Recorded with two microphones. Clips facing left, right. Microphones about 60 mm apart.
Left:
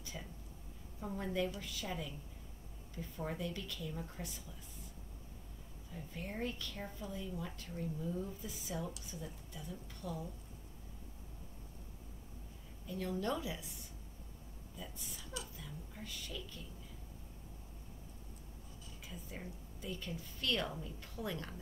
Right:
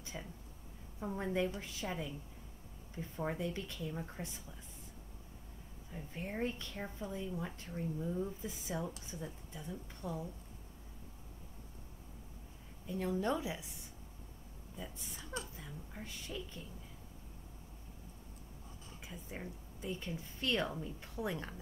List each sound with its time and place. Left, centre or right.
0.0 s a sound: right
1.0 s a woman's voice: right
5.9 s a woman's voice: right
12.8 s a woman's voice: right
14.8 s speech: right
19.0 s a woman's voice: right